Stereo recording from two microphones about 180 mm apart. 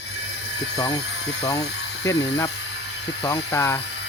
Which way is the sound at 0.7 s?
20° left (ahead or behind).